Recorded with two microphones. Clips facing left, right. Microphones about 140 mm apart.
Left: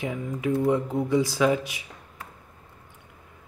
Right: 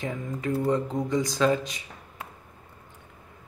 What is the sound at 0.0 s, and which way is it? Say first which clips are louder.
Speech: left 2 dB; 10° left (ahead or behind).